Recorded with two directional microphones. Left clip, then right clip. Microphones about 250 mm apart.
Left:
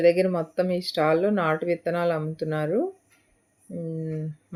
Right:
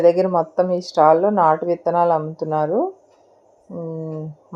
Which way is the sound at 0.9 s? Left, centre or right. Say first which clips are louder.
Right 9 dB; right.